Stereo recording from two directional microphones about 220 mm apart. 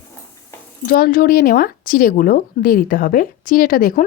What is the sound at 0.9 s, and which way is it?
Speech, 40° left (ahead or behind).